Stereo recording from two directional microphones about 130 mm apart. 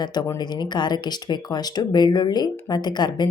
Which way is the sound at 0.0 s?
30° left (ahead or behind).